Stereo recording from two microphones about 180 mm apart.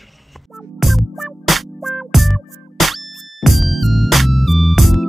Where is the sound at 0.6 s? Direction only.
Centre (ahead or behind).